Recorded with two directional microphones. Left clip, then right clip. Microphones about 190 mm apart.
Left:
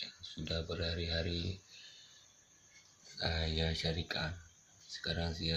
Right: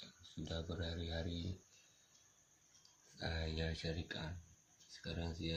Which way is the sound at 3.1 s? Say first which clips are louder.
Left 7 dB; 5° left (ahead or behind).